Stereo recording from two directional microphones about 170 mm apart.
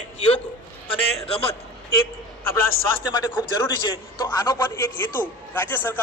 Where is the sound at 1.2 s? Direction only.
35° left (ahead or behind).